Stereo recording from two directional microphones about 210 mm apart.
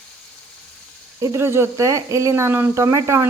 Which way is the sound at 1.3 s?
10° right (ahead or behind).